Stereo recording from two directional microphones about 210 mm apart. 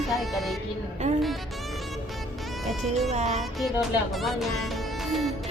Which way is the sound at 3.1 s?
30° right (ahead or behind).